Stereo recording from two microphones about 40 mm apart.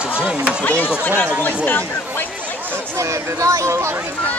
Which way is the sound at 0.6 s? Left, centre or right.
Left.